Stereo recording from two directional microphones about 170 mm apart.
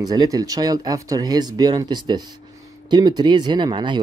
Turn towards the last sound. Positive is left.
turn(degrees=-25)  # may be behind; listen again after turning